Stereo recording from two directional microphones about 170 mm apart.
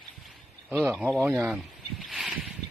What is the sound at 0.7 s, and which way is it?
Speech, 10° right (ahead or behind).